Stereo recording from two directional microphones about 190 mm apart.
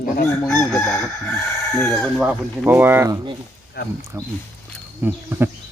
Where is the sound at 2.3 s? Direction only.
10° right (ahead or behind).